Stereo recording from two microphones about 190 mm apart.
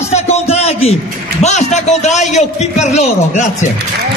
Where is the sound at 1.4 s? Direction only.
35° left (ahead or behind).